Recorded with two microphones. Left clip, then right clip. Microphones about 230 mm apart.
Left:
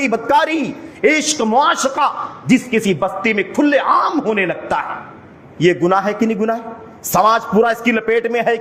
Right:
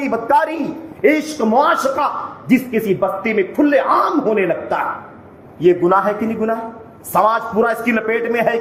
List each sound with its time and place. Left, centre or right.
0.0 s a man's voice: left
1.0 s a man's voice: left